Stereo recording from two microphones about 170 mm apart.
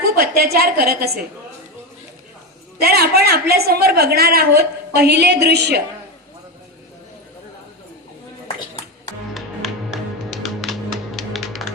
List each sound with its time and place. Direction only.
0.2 s a woman's voice: 65° right (ahead or behind)
2.8 s a woman's voice: 65° right (ahead or behind)
9.3 s music: centre (ahead or behind)